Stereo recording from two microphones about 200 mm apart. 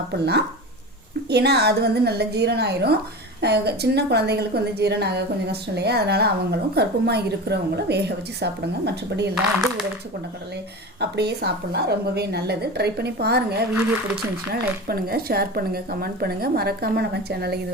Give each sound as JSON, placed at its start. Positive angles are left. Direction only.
{"t": 0.1, "sound": "a woman's voice", "side_deg": -55}
{"t": 9.3, "sound": "speech", "side_deg": 0}
{"t": 11.0, "sound": "a woman's voice", "side_deg": -55}
{"t": 14.8, "sound": "a woman's voice", "side_deg": -50}